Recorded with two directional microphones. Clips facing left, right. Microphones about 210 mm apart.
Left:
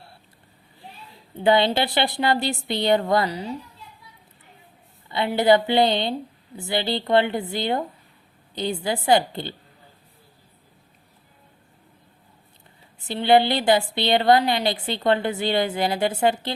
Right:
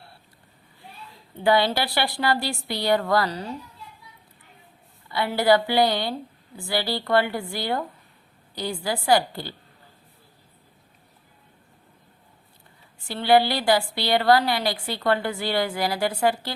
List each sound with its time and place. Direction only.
1.5 s a woman's voice: 20° left (ahead or behind)
5.0 s a woman's voice: 20° left (ahead or behind)
13.0 s a woman's voice: 20° left (ahead or behind)